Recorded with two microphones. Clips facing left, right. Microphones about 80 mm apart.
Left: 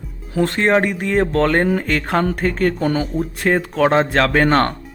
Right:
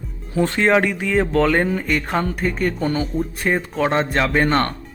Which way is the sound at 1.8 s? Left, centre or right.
Left.